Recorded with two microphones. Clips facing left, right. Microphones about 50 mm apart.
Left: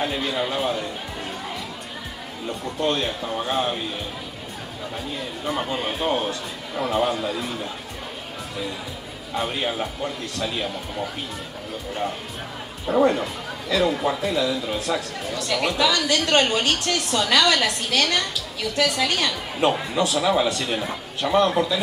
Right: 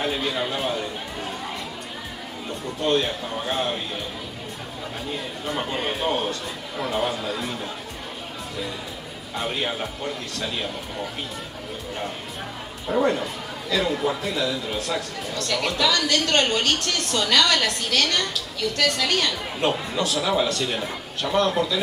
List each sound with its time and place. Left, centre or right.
0.0 s speech: centre
2.9 s speech: centre
5.4 s speech: centre
9.3 s speech: centre
13.7 s speech: centre